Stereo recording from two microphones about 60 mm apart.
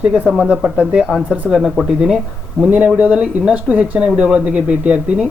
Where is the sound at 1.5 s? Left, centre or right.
Centre.